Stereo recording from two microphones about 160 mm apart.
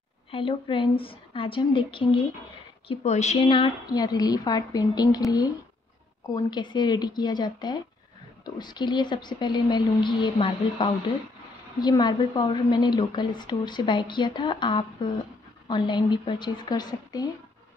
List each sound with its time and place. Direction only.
0.3 s a woman's voice: 35° left (ahead or behind)
2.9 s a woman's voice: 45° left (ahead or behind)
3.4 s a woman's voice: 30° left (ahead or behind)